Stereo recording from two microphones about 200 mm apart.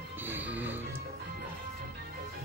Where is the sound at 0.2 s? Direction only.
10° right (ahead or behind).